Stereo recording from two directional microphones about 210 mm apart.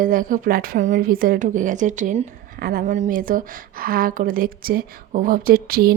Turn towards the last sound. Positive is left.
turn(degrees=-45)  # may be behind; listen again after turning